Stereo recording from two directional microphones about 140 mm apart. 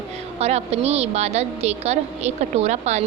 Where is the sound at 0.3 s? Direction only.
50° right (ahead or behind).